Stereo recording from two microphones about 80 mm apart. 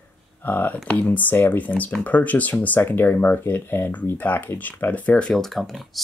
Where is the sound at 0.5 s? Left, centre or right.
Left.